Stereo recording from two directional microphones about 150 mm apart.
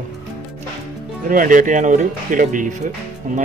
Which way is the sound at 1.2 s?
65° right (ahead or behind).